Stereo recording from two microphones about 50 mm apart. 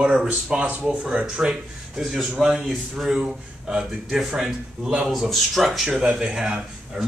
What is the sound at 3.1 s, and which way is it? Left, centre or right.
Speech, centre.